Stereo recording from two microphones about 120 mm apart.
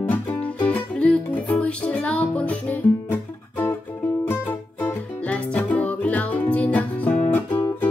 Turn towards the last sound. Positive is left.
turn(degrees=15)  # may be behind; listen again after turning